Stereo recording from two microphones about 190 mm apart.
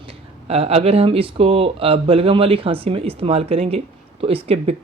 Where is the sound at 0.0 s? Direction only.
30° right (ahead or behind).